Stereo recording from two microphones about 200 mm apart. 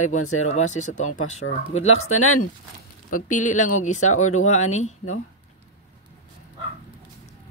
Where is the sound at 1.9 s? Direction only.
90° left.